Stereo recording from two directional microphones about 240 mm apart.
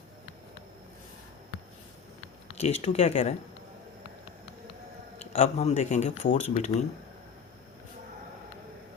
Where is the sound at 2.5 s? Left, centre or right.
Left.